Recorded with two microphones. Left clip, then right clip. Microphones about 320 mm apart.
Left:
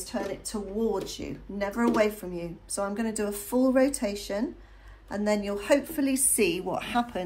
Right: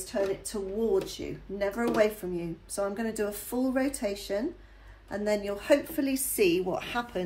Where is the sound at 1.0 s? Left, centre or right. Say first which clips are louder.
Left 1 dB; centre.